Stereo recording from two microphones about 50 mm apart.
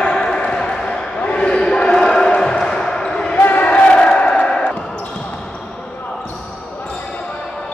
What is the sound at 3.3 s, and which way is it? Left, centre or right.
Crowd, left.